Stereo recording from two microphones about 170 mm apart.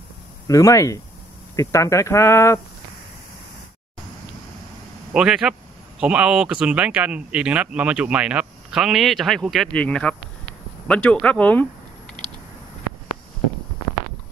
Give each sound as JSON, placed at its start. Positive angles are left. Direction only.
{"t": 0.5, "sound": "speech", "side_deg": 20}
{"t": 5.1, "sound": "speech", "side_deg": -5}